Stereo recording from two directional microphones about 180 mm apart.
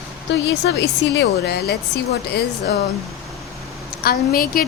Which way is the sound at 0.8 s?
70° left (ahead or behind).